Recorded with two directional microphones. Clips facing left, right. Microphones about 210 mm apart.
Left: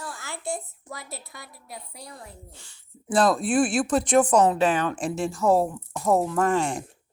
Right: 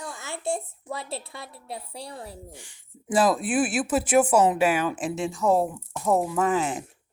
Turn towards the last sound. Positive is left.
turn(degrees=-5)  # may be behind; listen again after turning